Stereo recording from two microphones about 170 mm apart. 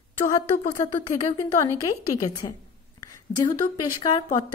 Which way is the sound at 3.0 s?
25° left (ahead or behind).